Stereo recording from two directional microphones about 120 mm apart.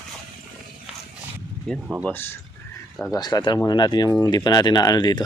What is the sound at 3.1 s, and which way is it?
Speech, 35° left (ahead or behind).